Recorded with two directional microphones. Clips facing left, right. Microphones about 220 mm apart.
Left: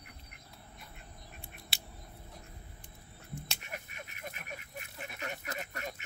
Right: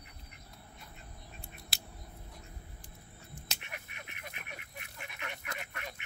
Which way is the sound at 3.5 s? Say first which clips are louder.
Left 3 dB; 40° left (ahead or behind).